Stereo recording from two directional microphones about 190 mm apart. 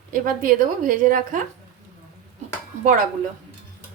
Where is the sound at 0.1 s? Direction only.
45° right (ahead or behind).